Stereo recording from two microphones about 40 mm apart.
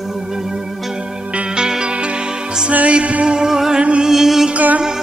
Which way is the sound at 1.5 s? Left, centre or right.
Centre.